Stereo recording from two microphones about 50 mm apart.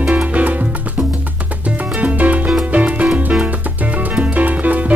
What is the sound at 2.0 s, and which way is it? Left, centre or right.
Music, right.